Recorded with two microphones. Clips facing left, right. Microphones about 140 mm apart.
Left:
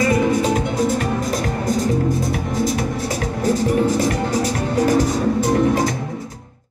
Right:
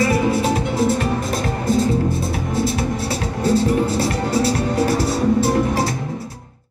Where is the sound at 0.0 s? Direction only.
20° left (ahead or behind).